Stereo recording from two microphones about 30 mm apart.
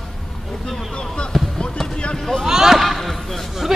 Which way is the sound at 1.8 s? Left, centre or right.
Centre.